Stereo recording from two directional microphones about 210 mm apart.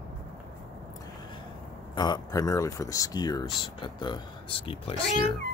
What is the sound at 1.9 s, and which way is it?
Speech, 20° left (ahead or behind).